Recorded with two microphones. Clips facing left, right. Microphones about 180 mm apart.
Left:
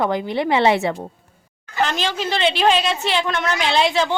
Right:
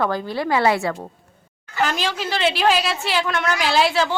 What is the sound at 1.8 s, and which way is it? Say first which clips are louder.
A woman's voice: left 1 dB; 5° right (ahead or behind).